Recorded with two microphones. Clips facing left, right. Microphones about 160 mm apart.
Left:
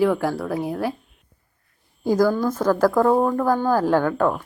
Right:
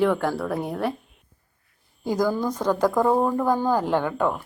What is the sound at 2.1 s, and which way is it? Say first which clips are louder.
A woman's voice: left 4 dB; 15° right (ahead or behind).